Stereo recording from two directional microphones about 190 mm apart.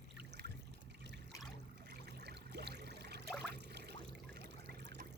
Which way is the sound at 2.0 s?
60° right (ahead or behind).